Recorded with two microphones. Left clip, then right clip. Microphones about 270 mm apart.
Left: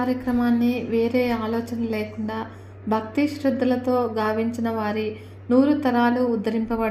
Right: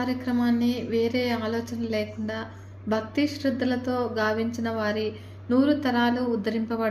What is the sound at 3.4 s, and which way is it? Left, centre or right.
A woman's voice, centre.